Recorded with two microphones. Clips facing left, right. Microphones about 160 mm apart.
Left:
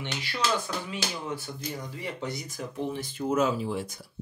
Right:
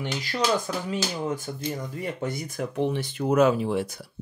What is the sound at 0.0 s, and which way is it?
Speech, 40° right (ahead or behind).